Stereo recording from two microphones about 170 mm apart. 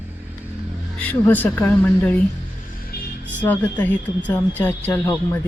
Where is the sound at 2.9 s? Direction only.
65° left (ahead or behind).